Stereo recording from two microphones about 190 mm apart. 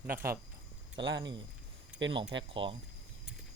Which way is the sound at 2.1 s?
25° right (ahead or behind).